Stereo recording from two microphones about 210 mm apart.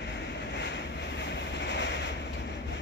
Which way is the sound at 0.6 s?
55° left (ahead or behind).